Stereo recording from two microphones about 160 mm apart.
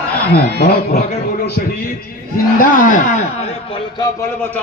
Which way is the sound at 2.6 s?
55° left (ahead or behind).